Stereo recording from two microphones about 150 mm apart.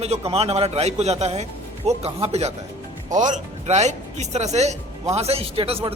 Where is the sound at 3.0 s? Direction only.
55° right (ahead or behind).